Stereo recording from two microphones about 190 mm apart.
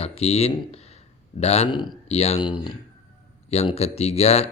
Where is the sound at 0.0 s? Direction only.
30° left (ahead or behind).